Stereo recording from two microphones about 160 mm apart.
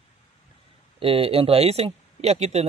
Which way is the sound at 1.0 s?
35° right (ahead or behind).